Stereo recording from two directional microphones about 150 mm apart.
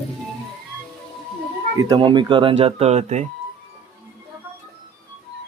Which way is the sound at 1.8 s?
30° right (ahead or behind).